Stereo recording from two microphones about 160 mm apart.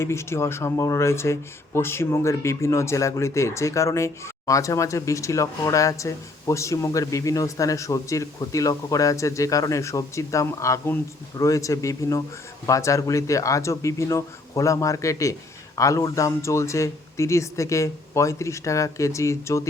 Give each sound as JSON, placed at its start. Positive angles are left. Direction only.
{"t": 0.0, "sound": "speech", "side_deg": 15}